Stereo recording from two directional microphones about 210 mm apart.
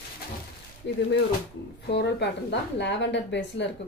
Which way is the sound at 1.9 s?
55° left (ahead or behind).